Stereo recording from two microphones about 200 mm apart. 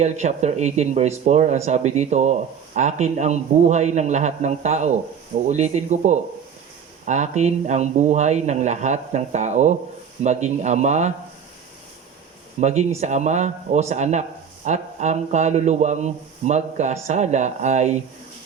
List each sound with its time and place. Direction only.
0.0 s speech: 35° right (ahead or behind)
12.5 s speech: 35° right (ahead or behind)